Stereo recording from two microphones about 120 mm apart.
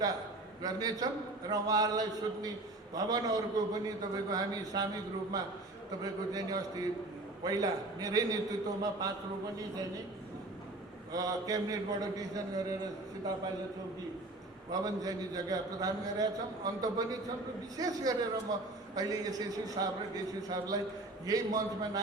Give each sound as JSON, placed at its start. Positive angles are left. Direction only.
{"t": 0.6, "sound": "a man's voice", "side_deg": -30}
{"t": 11.1, "sound": "a man's voice", "side_deg": -30}
{"t": 14.7, "sound": "a man's voice", "side_deg": -30}